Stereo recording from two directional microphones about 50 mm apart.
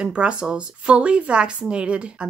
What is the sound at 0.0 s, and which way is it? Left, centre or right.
A woman's voice, right.